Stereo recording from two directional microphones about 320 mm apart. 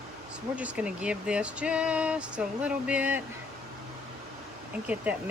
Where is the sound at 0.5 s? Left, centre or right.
Centre.